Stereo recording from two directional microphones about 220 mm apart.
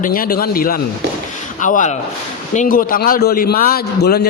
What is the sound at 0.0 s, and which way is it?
A man's voice, 40° left (ahead or behind).